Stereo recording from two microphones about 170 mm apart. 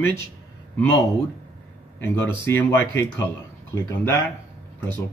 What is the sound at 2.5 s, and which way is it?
Speech, 15° left (ahead or behind).